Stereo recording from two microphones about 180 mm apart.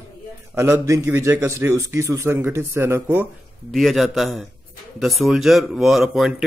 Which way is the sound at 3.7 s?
Centre (ahead or behind).